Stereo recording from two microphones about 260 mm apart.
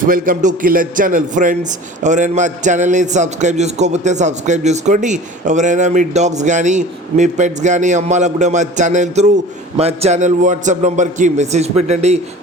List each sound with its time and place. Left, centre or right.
0.0 s a man's voice: right